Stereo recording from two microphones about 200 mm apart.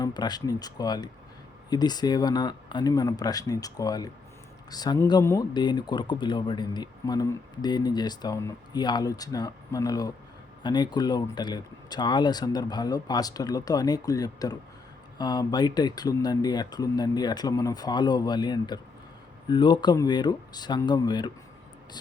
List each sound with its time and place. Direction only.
0.0 s speech: 20° left (ahead or behind)